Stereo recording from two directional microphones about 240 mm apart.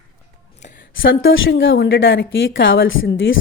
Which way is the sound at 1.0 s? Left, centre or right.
Left.